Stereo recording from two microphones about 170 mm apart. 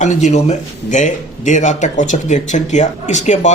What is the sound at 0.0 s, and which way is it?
Speech, 45° left (ahead or behind).